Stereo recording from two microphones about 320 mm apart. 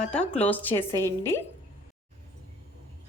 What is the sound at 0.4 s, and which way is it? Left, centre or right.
Speech, centre.